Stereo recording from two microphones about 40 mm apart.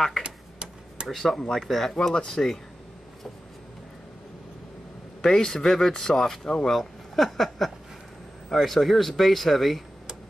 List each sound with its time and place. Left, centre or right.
0.2 s tick-tock: right
1.0 s speech: centre
5.2 s speech: centre
6.8 s speech: centre